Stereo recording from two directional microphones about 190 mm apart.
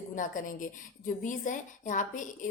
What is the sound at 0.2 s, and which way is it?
A woman's voice, 45° left (ahead or behind).